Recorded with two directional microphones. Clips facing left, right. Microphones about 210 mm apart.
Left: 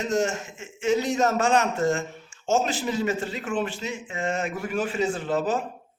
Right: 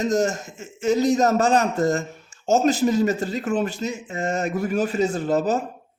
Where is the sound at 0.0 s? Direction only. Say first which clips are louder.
Right 4 dB; 40° right (ahead or behind).